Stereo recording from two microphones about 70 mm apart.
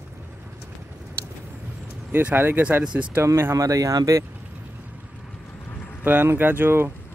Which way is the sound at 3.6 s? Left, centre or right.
Right.